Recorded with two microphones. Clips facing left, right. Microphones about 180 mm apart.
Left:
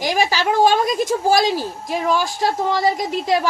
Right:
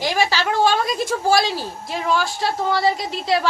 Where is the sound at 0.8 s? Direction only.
45° left (ahead or behind).